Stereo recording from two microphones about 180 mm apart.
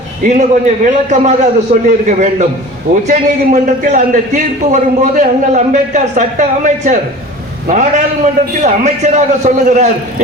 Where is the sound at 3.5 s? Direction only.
45° right (ahead or behind).